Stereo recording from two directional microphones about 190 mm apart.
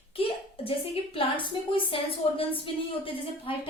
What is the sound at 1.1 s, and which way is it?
A woman's voice, 25° left (ahead or behind).